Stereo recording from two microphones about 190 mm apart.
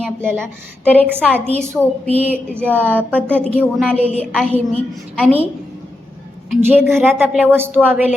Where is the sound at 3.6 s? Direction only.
5° right (ahead or behind).